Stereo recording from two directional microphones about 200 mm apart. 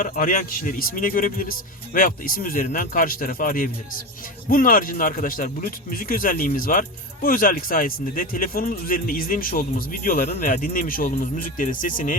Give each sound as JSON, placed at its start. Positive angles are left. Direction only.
{"t": 0.0, "sound": "speech", "side_deg": 45}